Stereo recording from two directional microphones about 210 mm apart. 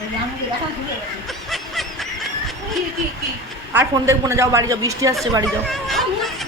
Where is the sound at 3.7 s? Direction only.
10° right (ahead or behind).